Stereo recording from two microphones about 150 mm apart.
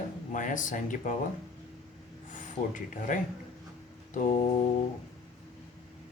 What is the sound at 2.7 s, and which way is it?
Speech, 60° left (ahead or behind).